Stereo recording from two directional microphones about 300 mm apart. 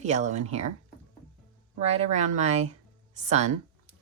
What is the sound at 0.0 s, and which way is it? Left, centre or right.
Speech, right.